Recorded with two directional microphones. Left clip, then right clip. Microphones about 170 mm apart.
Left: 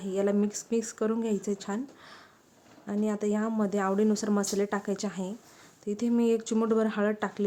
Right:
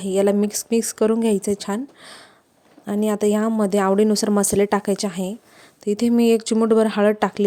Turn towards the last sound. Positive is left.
turn(degrees=-35)  # may be behind; listen again after turning